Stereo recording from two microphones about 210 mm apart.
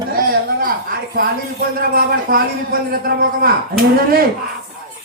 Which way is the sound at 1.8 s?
45° right (ahead or behind).